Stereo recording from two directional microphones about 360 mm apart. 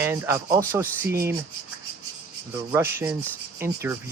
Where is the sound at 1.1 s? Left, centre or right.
Right.